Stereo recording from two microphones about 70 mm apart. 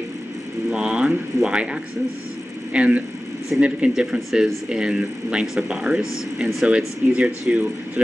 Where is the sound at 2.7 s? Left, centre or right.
Centre.